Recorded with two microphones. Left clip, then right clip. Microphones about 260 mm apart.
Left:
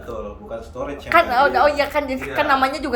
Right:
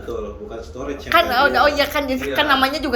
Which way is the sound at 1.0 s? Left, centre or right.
Centre.